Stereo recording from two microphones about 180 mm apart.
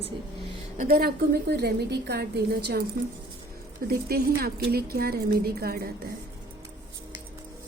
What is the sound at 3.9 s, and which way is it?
A woman's voice, 60° right (ahead or behind).